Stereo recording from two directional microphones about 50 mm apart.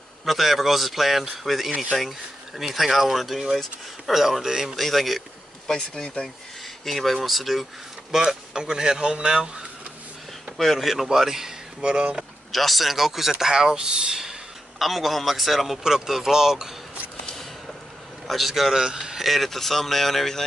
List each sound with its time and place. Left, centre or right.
0.2 s speech: centre
4.7 s speech: centre
5.7 s speech: centre
6.8 s speech: centre
10.6 s speech: centre
12.2 s speech: centre
14.8 s speech: centre
18.2 s a man's voice: centre
19.2 s speech: centre